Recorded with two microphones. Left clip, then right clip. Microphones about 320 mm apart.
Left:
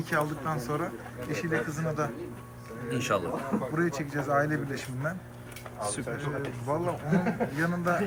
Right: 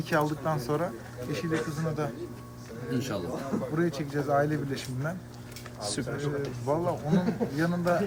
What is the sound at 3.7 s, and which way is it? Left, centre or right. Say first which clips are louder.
A man's voice: right 2 dB; centre.